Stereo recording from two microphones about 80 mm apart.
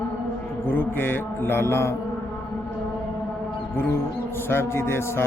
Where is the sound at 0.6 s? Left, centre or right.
Left.